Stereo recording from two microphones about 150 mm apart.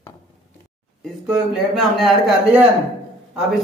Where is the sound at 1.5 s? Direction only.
Centre (ahead or behind).